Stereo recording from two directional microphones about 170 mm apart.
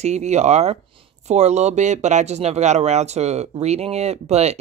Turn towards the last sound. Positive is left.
turn(degrees=-40)  # may be behind; listen again after turning